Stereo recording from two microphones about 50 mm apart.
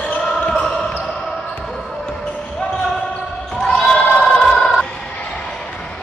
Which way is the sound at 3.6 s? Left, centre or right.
Centre.